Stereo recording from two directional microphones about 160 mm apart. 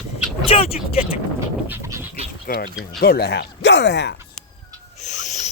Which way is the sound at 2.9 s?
75° left (ahead or behind).